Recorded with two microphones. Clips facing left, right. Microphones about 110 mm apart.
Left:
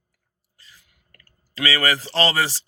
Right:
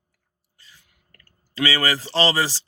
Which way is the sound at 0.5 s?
35° left (ahead or behind).